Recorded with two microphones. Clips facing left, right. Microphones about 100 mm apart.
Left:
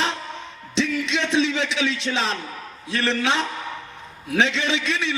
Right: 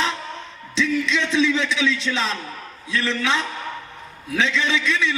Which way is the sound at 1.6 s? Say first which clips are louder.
Right 2 dB; 60° left (ahead or behind).